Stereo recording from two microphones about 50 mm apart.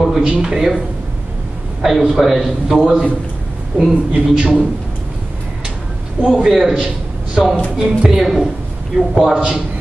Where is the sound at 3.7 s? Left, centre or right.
Centre.